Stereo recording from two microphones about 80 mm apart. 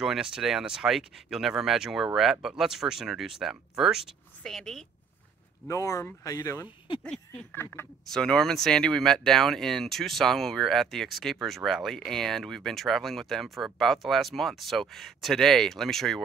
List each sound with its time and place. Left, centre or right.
0.0 s speech: centre
4.4 s speech: centre
5.7 s speech: left
7.0 s speech: centre
7.5 s speech: left
8.1 s speech: centre